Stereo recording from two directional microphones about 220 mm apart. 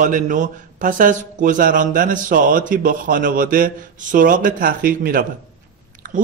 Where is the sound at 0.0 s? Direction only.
35° right (ahead or behind).